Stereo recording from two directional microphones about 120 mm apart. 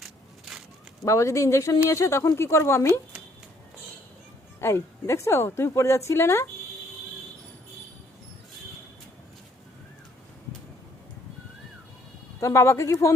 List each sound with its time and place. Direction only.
0.0 s crushing: centre (ahead or behind)
1.0 s a woman's voice: 25° left (ahead or behind)
4.6 s a woman's voice: 25° left (ahead or behind)
12.4 s a woman's voice: 25° left (ahead or behind)